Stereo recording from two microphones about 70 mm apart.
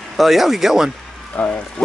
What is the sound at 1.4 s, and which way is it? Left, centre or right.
Speech, centre.